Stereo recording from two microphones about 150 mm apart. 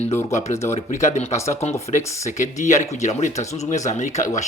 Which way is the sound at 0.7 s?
50° left (ahead or behind).